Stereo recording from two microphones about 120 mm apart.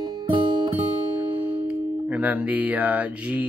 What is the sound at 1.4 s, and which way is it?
Speech, 10° right (ahead or behind).